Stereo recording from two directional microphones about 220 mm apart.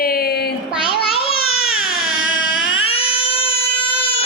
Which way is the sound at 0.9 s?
25° left (ahead or behind).